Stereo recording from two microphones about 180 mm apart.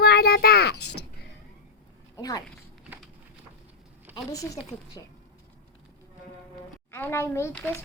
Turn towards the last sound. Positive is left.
turn(degrees=15)  # may be behind; listen again after turning